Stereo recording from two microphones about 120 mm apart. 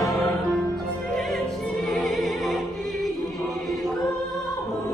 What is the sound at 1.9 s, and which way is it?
Music, centre (ahead or behind).